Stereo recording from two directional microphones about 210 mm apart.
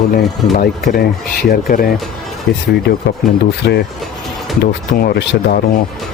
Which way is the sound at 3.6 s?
55° left (ahead or behind).